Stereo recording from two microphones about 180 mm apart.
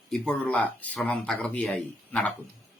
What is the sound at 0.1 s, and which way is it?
Speech, 5° left (ahead or behind).